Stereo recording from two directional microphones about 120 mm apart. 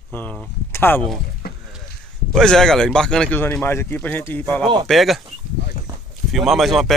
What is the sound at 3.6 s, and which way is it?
Speech, 20° left (ahead or behind).